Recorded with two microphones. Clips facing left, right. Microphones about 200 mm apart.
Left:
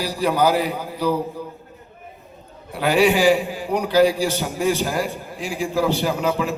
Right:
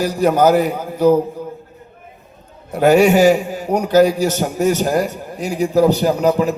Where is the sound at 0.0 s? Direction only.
45° right (ahead or behind).